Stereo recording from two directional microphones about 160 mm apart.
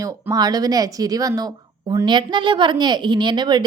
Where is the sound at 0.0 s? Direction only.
20° right (ahead or behind).